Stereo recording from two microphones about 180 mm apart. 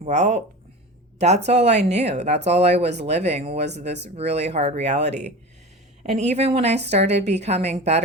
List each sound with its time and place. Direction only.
0.0 s a woman's voice: 40° right (ahead or behind)
1.5 s a woman's voice: 40° right (ahead or behind)